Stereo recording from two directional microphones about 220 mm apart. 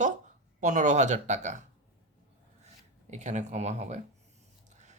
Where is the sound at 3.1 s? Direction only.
30° right (ahead or behind).